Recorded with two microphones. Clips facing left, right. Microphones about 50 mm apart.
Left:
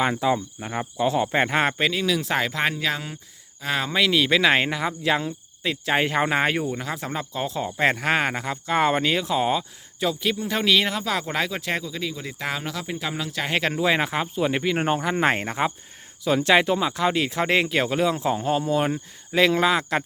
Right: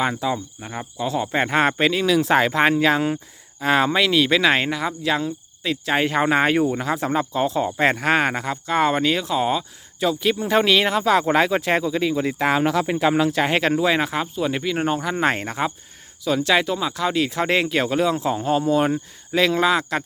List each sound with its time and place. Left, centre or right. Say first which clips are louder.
0.0 s speech: left 1 dB; centre
1.3 s speech: right 2 dB; centre
1.9 s speech: right 6 dB; centre
3.9 s speech: right 2 dB; centre
10.3 s speech: right 4 dB; centre
13.5 s speech: right 3 dB; centre
16.2 s speech: left 1 dB; left